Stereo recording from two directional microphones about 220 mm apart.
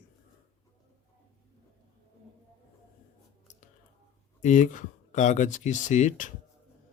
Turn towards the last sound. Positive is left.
turn(degrees=35)  # may be behind; listen again after turning